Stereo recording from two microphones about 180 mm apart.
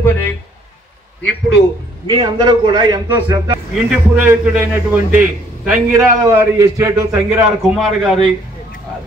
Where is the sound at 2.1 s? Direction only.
25° right (ahead or behind).